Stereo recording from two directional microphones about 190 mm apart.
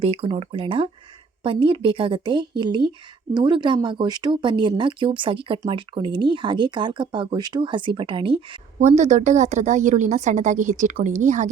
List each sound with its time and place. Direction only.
0.0 s speech: 30° right (ahead or behind)
8.8 s a woman's voice: 40° right (ahead or behind)